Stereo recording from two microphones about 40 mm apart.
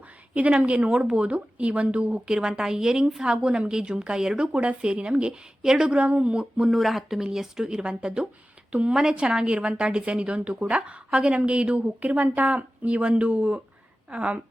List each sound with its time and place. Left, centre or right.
0.3 s a woman's voice: right
2.2 s a woman's voice: centre
4.5 s a woman's voice: right
4.8 s a woman's voice: right
5.6 s speech: centre
5.9 s a woman's voice: right
6.7 s speech: centre
7.2 s a woman's voice: centre; by 14.4 s right